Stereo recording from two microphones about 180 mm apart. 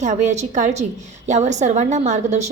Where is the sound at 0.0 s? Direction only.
40° right (ahead or behind).